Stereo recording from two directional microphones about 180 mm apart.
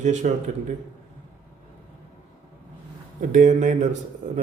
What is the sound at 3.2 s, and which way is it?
Speech, 45° right (ahead or behind).